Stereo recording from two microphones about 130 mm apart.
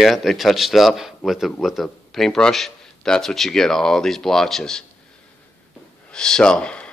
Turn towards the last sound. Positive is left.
turn(degrees=5)  # may be behind; listen again after turning